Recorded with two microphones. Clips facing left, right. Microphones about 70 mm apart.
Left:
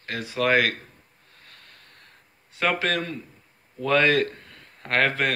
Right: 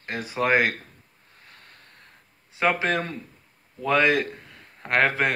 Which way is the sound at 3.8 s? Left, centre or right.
Centre.